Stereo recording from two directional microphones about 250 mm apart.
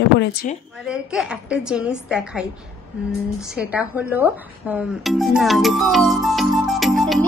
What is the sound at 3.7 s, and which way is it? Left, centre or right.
Speech, centre.